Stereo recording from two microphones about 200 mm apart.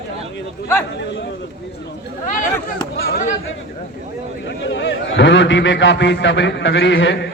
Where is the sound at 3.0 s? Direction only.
50° left (ahead or behind).